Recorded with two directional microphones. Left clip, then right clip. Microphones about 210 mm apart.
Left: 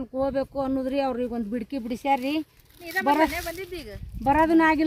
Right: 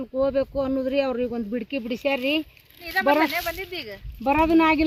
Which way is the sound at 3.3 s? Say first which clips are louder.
Right 4 dB; 60° left (ahead or behind).